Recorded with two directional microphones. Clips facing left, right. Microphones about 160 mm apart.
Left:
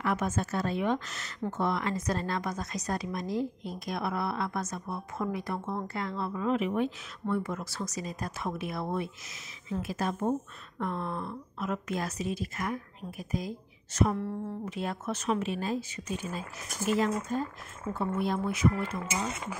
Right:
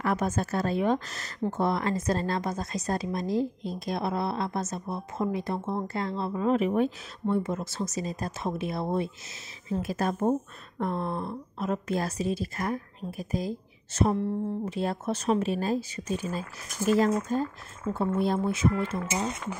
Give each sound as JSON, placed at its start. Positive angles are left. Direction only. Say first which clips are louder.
{"t": 0.0, "sound": "a woman's voice", "louder": "right 3 dB", "side_deg": -35}
{"t": 7.2, "sound": "a woman's voice", "louder": "right 4 dB", "side_deg": -25}